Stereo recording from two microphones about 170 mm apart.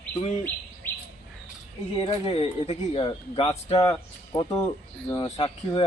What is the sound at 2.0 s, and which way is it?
Speech, 35° left (ahead or behind).